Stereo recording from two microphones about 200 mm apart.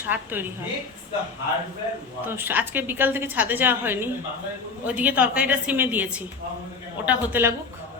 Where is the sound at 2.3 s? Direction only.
10° right (ahead or behind).